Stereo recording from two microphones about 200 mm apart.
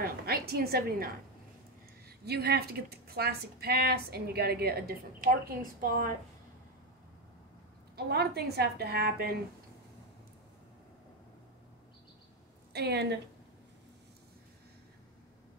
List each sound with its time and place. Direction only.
0.0 s a woman's voice: 50° right (ahead or behind)
7.9 s a woman's voice: 55° right (ahead or behind)
12.7 s a woman's voice: 55° right (ahead or behind)